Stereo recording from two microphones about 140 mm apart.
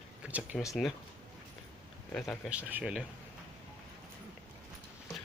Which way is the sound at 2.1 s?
5° left (ahead or behind).